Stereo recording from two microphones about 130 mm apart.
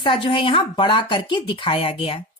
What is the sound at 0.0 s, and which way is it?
Speech, 40° left (ahead or behind).